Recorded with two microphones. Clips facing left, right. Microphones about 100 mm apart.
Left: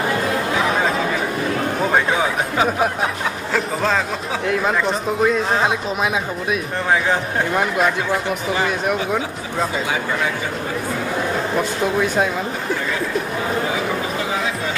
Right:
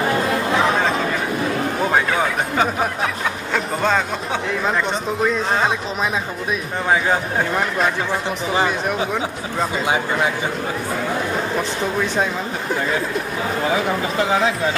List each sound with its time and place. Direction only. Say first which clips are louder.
1.8 s a sound: even; centre (ahead or behind)
2.1 s speech: even; 5° left (ahead or behind)
8.8 s speech: left 1 dB; centre (ahead or behind)